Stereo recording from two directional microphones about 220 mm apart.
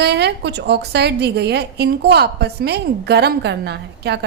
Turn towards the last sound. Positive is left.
turn(degrees=-50)  # may be behind; listen again after turning